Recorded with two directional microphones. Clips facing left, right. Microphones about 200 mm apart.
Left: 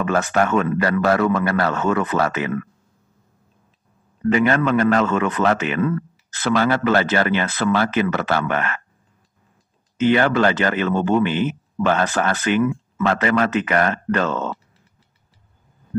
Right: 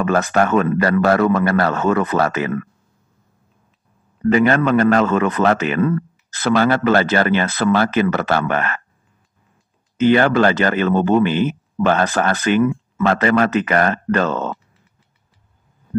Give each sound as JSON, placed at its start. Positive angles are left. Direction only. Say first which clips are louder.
{"t": 0.0, "sound": "speech", "louder": "right 2 dB", "side_deg": -40}
{"t": 4.2, "sound": "speech", "louder": "right 3 dB", "side_deg": -40}
{"t": 9.9, "sound": "speech", "louder": "right 3 dB", "side_deg": -40}